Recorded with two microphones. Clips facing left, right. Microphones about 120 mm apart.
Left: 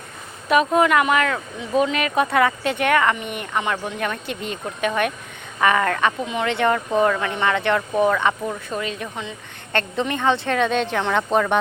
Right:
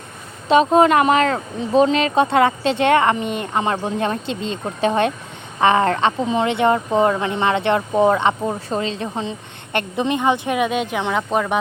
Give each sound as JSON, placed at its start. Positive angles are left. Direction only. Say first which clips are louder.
{"t": 0.4, "sound": "speech", "louder": "right 4 dB", "side_deg": -25}
{"t": 9.7, "sound": "speech", "louder": "right 3 dB", "side_deg": -15}